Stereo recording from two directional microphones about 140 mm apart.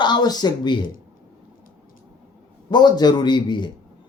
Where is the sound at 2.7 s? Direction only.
30° left (ahead or behind).